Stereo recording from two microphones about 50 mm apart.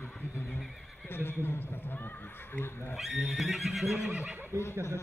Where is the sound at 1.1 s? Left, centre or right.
Left.